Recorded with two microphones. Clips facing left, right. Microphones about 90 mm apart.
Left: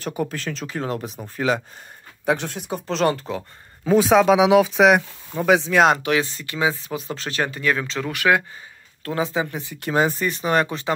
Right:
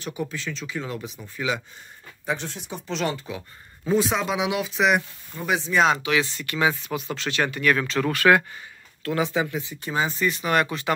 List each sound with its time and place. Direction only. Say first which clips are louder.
0.0 s speech: left 4 dB; 50° left (ahead or behind)
2.2 s speech: left 6 dB; 60° left (ahead or behind)
2.9 s speech: left 6 dB; 40° left (ahead or behind)
3.8 s speech: left 8 dB; 80° left
6.0 s speech: left 2 dB; 40° left (ahead or behind)
7.6 s speech: right 4 dB; 25° left (ahead or behind)
9.0 s speech: left 1 dB; 30° left (ahead or behind)
9.6 s speech: left 5 dB; 60° left (ahead or behind); by 10.9 s 30° left (ahead or behind)